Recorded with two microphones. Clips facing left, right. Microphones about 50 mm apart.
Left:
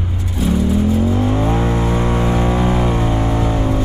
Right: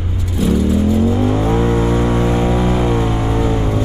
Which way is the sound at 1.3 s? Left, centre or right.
Centre.